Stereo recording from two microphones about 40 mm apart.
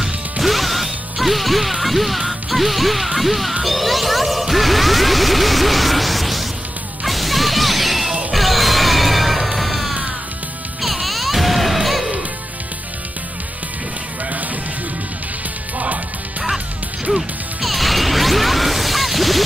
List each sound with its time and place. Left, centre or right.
0.0 s music: centre
10.8 s baby cry: centre
15.8 s music: right
17.1 s smash: centre